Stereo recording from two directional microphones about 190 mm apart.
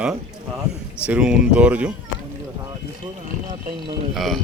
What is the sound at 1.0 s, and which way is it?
Speech, 5° right (ahead or behind).